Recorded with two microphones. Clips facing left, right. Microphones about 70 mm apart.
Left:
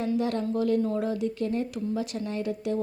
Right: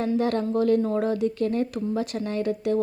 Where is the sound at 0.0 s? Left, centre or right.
Right.